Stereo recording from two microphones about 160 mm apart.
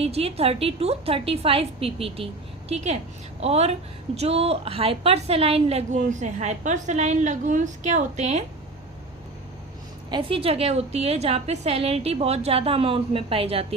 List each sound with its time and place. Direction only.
0.0 s a woman's voice: 40° right (ahead or behind)
10.1 s a woman's voice: 35° right (ahead or behind)